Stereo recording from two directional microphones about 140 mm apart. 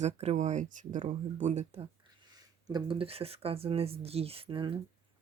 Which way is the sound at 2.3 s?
30° right (ahead or behind).